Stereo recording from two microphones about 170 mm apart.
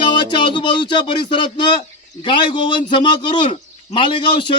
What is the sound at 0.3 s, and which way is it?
A man's voice, 30° left (ahead or behind).